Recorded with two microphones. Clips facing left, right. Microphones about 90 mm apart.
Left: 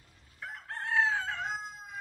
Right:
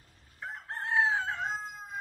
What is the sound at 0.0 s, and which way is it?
Crowing, 35° right (ahead or behind).